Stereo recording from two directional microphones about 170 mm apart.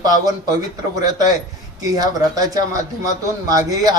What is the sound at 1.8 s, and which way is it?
A man's voice, 20° right (ahead or behind).